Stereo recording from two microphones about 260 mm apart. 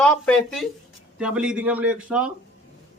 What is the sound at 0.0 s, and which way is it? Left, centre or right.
Speech, centre.